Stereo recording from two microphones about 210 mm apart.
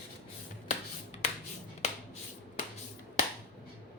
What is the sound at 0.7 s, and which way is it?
Finger snapping, 30° left (ahead or behind).